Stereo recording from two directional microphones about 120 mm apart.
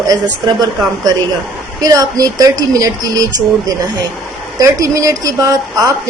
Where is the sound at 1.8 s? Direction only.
30° right (ahead or behind).